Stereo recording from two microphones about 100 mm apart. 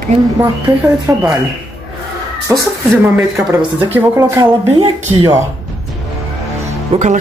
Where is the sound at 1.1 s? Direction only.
30° right (ahead or behind).